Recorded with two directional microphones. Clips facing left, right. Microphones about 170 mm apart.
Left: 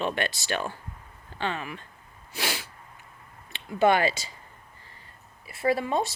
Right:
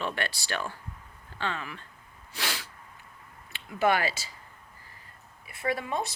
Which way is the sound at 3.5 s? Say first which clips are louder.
Left 4 dB; 25° left (ahead or behind).